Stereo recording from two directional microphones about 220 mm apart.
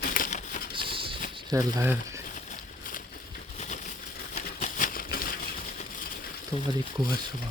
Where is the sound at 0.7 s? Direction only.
25° right (ahead or behind).